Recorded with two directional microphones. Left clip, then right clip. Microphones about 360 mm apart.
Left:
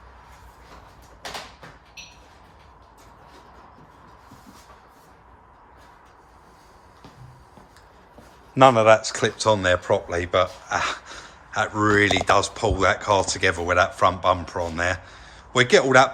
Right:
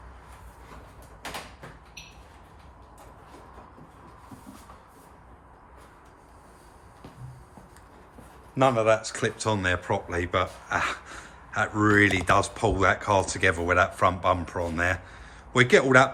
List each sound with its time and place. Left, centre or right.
8.5 s speech: left; by 16.0 s centre